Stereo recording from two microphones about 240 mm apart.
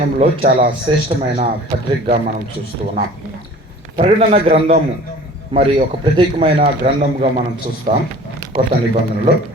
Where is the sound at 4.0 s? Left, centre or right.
Right.